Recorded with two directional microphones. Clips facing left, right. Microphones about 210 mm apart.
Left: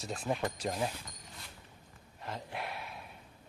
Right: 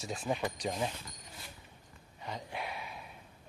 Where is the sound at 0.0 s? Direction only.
Centre (ahead or behind).